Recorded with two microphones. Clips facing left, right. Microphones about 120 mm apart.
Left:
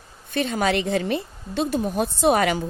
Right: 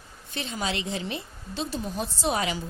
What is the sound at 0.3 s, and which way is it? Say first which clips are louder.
A woman's voice: left 9 dB; 55° left (ahead or behind).